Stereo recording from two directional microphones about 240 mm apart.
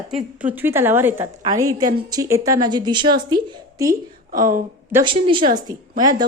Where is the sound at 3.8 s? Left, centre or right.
Right.